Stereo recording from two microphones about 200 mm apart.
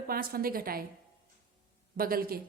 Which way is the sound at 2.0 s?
45° right (ahead or behind).